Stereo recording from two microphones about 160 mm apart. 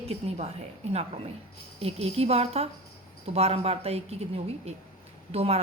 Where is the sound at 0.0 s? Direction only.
40° right (ahead or behind).